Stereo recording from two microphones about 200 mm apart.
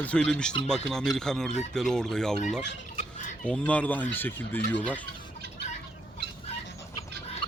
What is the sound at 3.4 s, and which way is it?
Speech, 5° left (ahead or behind).